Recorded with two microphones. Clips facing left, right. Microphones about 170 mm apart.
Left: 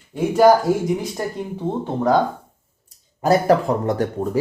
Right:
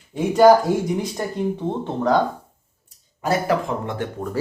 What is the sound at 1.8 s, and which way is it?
Speech, 5° left (ahead or behind).